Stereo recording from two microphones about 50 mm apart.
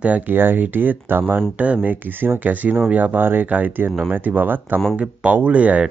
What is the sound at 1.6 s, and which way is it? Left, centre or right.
Speech, right.